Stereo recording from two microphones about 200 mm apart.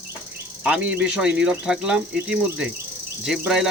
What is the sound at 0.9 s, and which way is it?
Speech, 5° right (ahead or behind).